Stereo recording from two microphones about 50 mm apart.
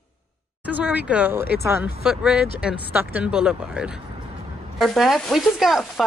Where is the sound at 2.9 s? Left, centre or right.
Right.